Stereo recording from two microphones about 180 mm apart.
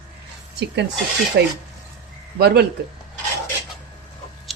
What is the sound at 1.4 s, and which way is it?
Speech, 65° right (ahead or behind).